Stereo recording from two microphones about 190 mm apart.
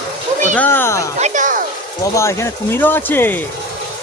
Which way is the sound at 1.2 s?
40° right (ahead or behind).